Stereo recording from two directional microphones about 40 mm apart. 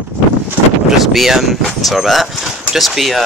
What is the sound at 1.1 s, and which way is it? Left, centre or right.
Speech, centre.